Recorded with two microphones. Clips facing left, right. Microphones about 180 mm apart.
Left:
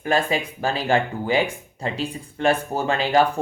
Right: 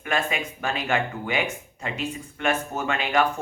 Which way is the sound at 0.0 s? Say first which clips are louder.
Left 5 dB; 35° left (ahead or behind).